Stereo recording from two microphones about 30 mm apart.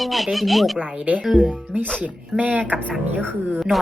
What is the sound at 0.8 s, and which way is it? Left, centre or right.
Speech, right.